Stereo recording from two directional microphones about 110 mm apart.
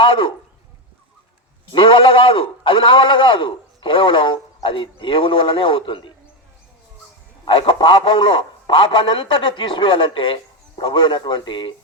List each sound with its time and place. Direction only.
0.0 s a man's voice: 50° left (ahead or behind)
1.7 s a man's voice: 55° left (ahead or behind)
7.4 s a man's voice: 50° left (ahead or behind)